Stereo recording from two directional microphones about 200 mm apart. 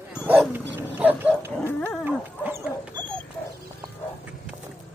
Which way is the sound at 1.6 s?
10° left (ahead or behind).